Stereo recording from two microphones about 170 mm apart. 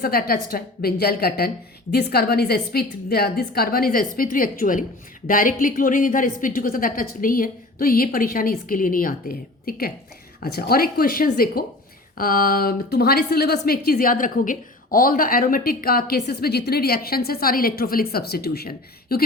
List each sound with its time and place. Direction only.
0.0 s a woman's voice: 60° left (ahead or behind)
13.7 s a woman's voice: 60° left (ahead or behind)